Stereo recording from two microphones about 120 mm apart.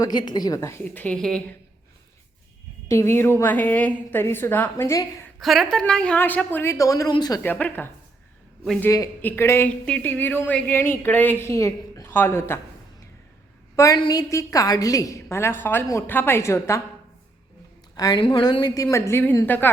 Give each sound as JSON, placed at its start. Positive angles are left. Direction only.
{"t": 0.0, "sound": "a woman's voice", "side_deg": 35}
{"t": 2.9, "sound": "speech", "side_deg": 20}
{"t": 5.4, "sound": "speech", "side_deg": 0}
{"t": 7.4, "sound": "speech", "side_deg": 15}
{"t": 8.9, "sound": "a woman's voice", "side_deg": 25}
{"t": 13.7, "sound": "a woman's voice", "side_deg": 30}
{"t": 17.9, "sound": "a woman's voice", "side_deg": 35}